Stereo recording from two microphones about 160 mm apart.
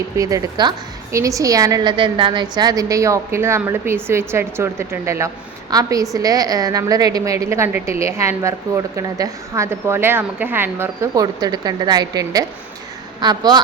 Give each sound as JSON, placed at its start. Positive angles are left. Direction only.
{"t": 0.2, "sound": "a woman's voice", "side_deg": -20}